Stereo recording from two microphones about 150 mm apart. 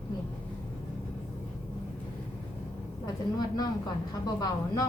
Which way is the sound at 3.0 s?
25° left (ahead or behind).